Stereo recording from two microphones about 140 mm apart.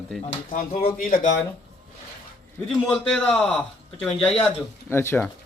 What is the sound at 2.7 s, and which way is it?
Speech, 5° left (ahead or behind).